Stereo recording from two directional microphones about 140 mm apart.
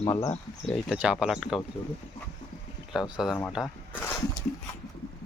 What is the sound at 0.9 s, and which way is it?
Speech, 5° right (ahead or behind).